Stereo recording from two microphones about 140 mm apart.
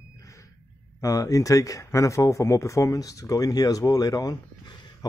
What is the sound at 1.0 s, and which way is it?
Speech, 25° left (ahead or behind).